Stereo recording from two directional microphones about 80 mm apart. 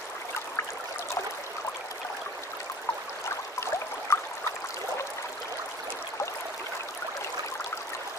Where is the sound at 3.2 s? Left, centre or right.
Left.